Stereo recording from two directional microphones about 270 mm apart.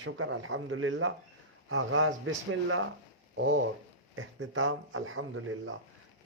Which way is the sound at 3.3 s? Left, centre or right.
Right.